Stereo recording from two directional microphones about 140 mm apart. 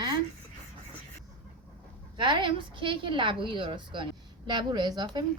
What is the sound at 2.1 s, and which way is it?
Speech, 35° right (ahead or behind).